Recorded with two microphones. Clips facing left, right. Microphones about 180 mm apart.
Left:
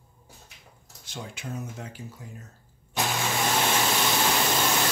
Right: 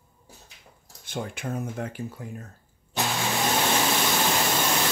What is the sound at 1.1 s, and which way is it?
Speech, 55° right (ahead or behind).